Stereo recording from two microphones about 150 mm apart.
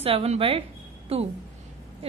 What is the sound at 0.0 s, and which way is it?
A woman's voice, 40° right (ahead or behind).